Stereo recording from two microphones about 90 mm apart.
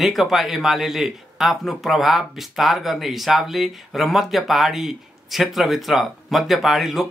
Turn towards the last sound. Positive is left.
turn(degrees=0)  # may be behind; listen again after turning